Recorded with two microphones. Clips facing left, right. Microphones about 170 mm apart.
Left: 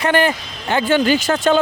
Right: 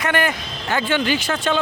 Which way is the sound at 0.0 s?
30° left (ahead or behind).